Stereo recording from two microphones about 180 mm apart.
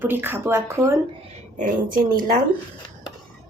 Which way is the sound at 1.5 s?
45° right (ahead or behind).